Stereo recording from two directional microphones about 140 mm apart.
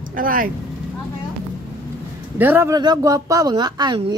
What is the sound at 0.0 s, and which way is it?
Speech, 75° right (ahead or behind).